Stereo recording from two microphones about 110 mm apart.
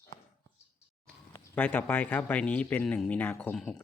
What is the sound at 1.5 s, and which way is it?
Speech, 15° left (ahead or behind).